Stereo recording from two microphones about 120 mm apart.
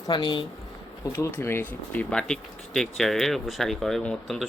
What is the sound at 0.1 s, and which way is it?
Speech, 40° left (ahead or behind).